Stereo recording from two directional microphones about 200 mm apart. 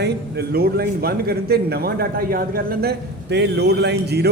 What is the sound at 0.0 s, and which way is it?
A man's voice, 50° right (ahead or behind).